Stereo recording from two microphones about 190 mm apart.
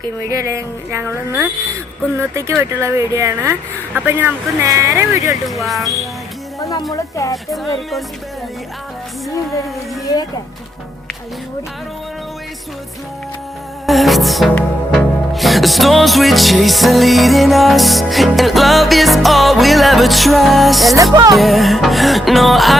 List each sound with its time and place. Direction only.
0.3 s speech: 15° right (ahead or behind)
5.5 s music: centre (ahead or behind)
6.6 s a sound: 15° left (ahead or behind)
6.9 s speech: 15° left (ahead or behind)
7.5 s music: centre (ahead or behind)
13.8 s music: centre (ahead or behind)
20.9 s music: 20° right (ahead or behind)
21.3 s music: centre (ahead or behind)